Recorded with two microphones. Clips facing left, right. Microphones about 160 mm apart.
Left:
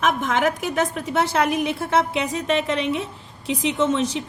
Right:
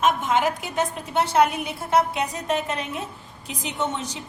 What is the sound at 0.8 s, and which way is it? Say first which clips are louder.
A woman's voice: left 1 dB; 90° left.